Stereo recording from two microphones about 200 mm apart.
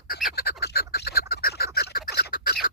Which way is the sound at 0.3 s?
45° left (ahead or behind).